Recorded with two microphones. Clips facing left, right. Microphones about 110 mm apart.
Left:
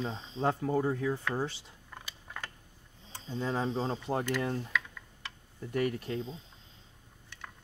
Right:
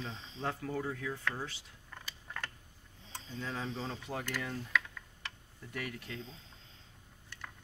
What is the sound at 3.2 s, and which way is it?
Speech, 30° left (ahead or behind).